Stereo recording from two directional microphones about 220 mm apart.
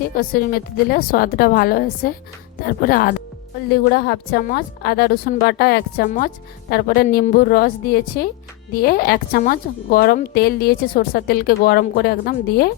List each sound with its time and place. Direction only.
0.2 s a woman's voice: 40° left (ahead or behind)